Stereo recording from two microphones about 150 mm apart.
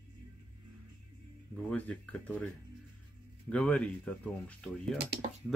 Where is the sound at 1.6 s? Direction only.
10° left (ahead or behind).